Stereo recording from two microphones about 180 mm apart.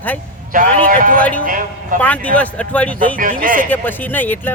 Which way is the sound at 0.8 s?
50° right (ahead or behind).